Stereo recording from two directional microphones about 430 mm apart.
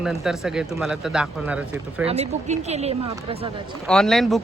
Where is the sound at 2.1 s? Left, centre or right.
Centre.